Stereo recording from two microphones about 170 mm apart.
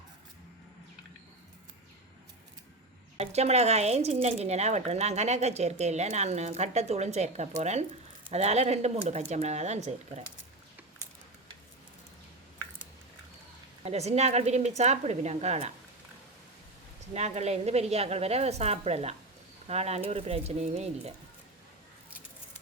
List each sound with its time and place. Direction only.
3.2 s speech: 40° right (ahead or behind)
13.8 s speech: 40° right (ahead or behind)
17.2 s speech: 40° right (ahead or behind)